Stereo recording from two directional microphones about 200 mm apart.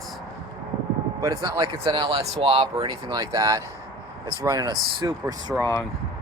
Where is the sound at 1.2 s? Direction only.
20° right (ahead or behind).